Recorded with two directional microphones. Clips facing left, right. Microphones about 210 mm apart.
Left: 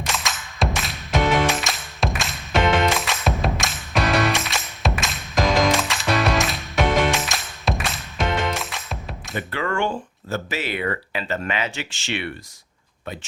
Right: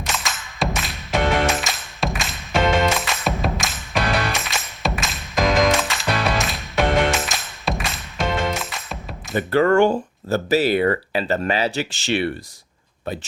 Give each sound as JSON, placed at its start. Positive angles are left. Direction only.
{"t": 0.1, "sound": "music", "side_deg": 0}
{"t": 9.3, "sound": "speech", "side_deg": -40}